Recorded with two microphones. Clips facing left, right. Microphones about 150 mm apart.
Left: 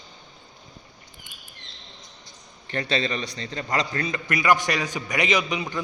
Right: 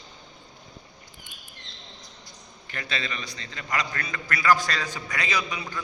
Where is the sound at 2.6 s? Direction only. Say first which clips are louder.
Left 8 dB; 35° left (ahead or behind).